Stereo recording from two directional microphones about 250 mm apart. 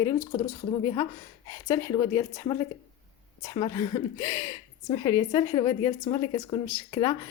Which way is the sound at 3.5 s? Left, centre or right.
Centre.